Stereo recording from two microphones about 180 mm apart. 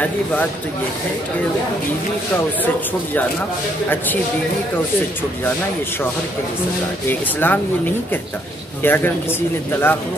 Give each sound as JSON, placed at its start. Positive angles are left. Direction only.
{"t": 7.1, "sound": "speech", "side_deg": 10}
{"t": 8.8, "sound": "speech", "side_deg": 10}